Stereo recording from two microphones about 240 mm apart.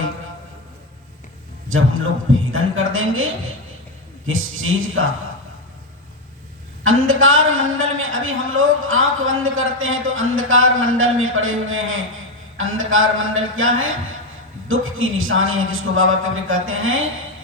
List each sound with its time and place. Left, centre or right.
1.7 s a woman's voice: right
4.3 s a woman's voice: right
6.8 s a woman's voice: right